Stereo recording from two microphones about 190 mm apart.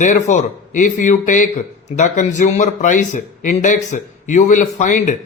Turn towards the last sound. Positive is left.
turn(degrees=40)  # may be behind; listen again after turning